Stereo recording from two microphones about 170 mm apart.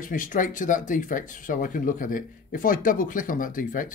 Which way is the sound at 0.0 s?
50° left (ahead or behind).